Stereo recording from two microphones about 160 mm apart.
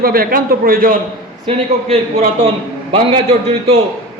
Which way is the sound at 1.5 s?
40° right (ahead or behind).